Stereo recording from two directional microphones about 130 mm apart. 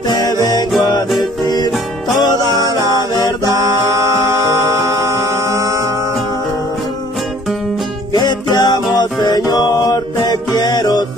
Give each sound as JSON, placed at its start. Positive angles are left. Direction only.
{"t": 0.1, "sound": "music", "side_deg": 30}
{"t": 2.4, "sound": "music", "side_deg": -25}
{"t": 8.1, "sound": "music", "side_deg": 35}